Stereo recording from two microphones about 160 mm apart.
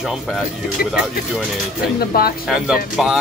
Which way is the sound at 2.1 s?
70° left (ahead or behind).